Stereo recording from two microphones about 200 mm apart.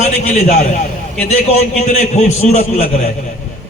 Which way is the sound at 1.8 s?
35° left (ahead or behind).